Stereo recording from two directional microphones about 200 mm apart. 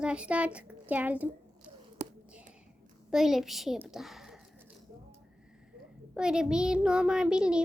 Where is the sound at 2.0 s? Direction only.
35° right (ahead or behind).